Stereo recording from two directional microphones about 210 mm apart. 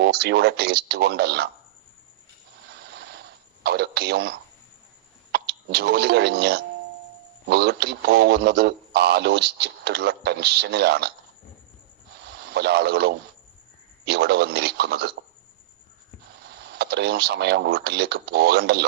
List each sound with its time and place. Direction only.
0.0 s speech: 50° right (ahead or behind)
2.6 s a sound: 50° right (ahead or behind)
5.3 s speech: 50° right (ahead or behind)
12.3 s speech: 50° right (ahead or behind)
16.5 s speech: 50° right (ahead or behind)